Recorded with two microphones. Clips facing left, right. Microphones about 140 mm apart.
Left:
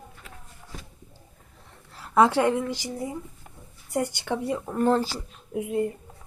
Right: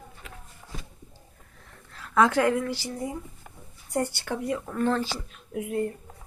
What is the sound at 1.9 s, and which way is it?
Speech, 30° left (ahead or behind).